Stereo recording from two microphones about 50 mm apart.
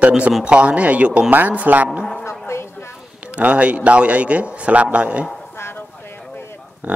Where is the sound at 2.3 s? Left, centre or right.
Left.